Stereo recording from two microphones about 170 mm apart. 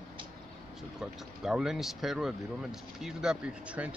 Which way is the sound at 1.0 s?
5° right (ahead or behind).